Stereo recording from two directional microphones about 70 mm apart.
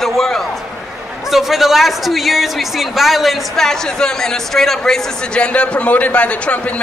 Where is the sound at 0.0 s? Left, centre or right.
Centre.